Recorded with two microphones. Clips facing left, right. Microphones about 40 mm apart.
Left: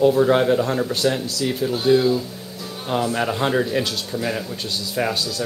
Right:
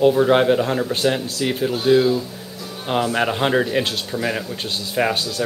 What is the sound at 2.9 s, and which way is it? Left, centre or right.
A man's voice, right.